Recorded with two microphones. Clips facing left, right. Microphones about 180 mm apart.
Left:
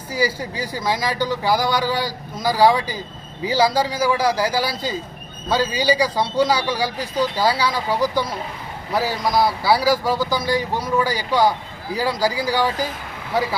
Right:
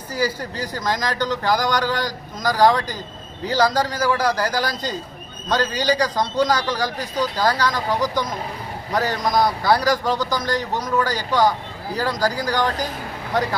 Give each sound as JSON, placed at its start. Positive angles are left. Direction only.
{"t": 0.1, "sound": "a man's voice", "side_deg": 10}